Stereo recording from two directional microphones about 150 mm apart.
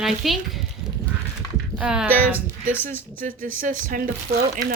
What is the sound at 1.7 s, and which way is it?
Speech, 5° right (ahead or behind).